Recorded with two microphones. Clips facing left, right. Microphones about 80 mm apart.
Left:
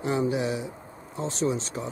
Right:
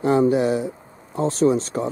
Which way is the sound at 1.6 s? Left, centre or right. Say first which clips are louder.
Right 9 dB; centre.